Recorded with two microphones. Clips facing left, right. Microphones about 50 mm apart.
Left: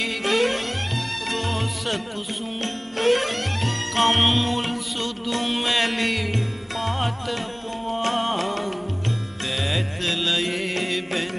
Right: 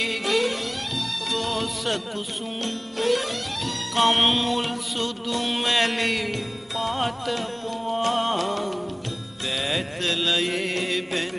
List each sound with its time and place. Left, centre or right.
0.2 s music: left
3.0 s music: left
4.1 s music: centre
8.1 s music: centre
9.7 s music: centre